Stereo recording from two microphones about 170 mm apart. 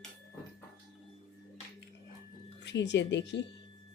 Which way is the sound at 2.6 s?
90° left.